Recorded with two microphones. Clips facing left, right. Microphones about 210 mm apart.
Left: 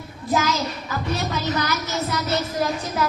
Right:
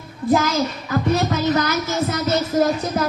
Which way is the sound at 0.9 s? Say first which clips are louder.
Right 9 dB; 50° right (ahead or behind).